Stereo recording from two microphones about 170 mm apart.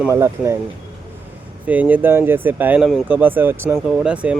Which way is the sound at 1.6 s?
10° right (ahead or behind).